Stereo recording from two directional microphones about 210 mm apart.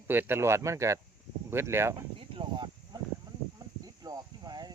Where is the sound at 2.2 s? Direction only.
25° right (ahead or behind).